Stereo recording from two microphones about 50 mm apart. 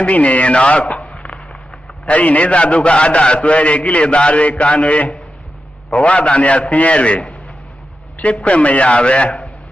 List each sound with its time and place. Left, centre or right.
0.0 s a man's voice: left